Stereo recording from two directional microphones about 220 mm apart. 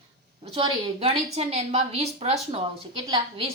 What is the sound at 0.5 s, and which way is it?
A woman's voice, 25° right (ahead or behind).